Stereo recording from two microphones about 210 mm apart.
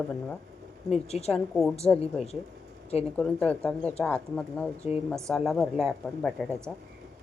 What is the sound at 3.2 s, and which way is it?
Speech, 5° left (ahead or behind).